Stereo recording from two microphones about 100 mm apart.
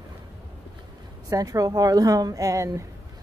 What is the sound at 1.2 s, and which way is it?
A woman's voice, 35° right (ahead or behind).